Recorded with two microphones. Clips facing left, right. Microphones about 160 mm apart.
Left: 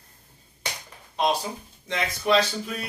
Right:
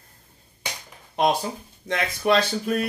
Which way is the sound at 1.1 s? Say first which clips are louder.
Right 3 dB; 55° right (ahead or behind).